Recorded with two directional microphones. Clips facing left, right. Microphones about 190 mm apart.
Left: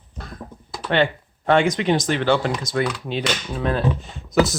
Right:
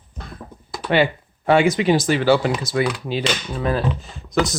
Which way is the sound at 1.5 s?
5° right (ahead or behind).